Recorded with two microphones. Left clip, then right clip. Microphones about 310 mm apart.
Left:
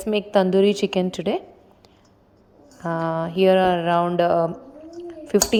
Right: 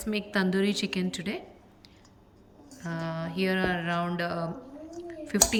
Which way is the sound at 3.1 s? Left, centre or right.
Centre.